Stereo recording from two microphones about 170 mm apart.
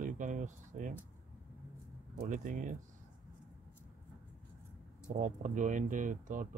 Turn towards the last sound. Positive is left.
turn(degrees=-50)  # may be behind; listen again after turning